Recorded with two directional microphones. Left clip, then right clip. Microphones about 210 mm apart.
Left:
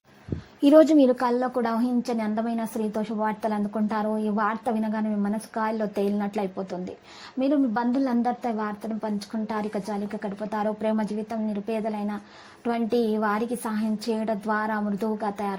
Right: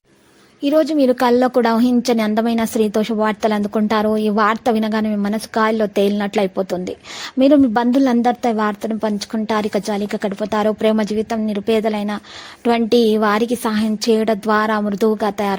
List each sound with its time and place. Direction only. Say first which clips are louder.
0.6 s a woman's voice: right 1 dB; centre (ahead or behind)
1.1 s a woman's voice: right 10 dB; 45° right (ahead or behind)